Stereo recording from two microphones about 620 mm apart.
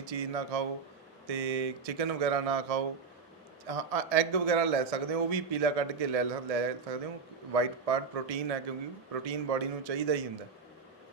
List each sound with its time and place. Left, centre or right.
0.0 s a man's voice: right